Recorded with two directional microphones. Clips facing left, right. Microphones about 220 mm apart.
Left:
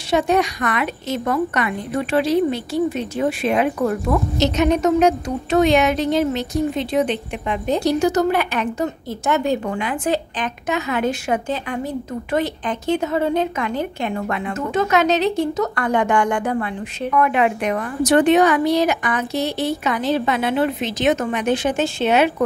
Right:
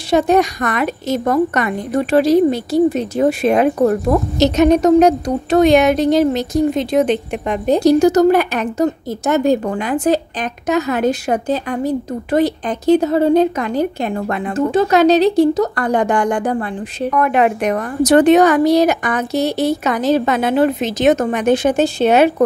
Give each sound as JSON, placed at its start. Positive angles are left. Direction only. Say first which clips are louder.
{"t": 0.1, "sound": "a woman's voice", "louder": "right 4 dB", "side_deg": -40}